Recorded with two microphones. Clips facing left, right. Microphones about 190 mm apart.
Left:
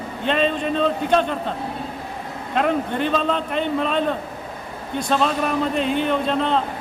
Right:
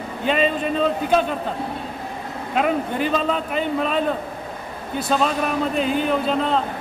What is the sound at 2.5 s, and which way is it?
A man's voice, 5° right (ahead or behind).